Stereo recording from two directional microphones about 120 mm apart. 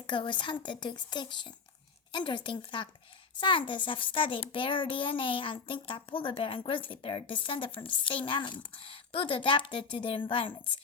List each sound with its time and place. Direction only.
0.1 s a child's voice: 40° left (ahead or behind)